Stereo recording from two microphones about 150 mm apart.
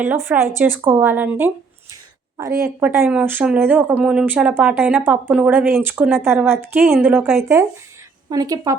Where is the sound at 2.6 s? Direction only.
15° right (ahead or behind).